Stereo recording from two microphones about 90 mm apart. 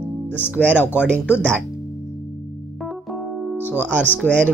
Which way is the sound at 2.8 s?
Centre (ahead or behind).